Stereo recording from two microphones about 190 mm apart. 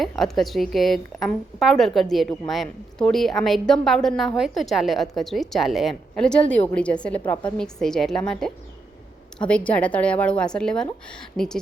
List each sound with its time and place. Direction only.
0.0 s a woman's voice: centre (ahead or behind)